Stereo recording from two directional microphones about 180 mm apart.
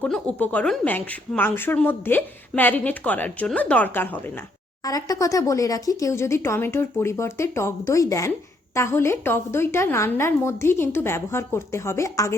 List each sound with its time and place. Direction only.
0.0 s speech: 10° left (ahead or behind)